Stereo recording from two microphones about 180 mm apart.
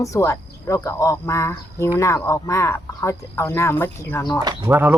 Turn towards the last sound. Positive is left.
turn(degrees=-10)  # may be behind; listen again after turning